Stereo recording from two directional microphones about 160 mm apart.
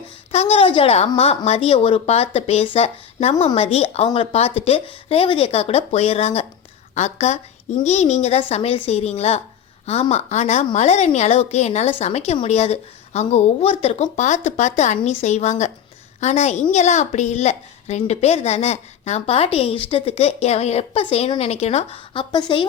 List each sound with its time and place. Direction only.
0.3 s a woman's voice: 40° left (ahead or behind)